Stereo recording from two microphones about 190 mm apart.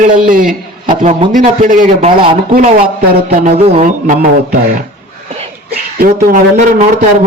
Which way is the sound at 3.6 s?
35° right (ahead or behind).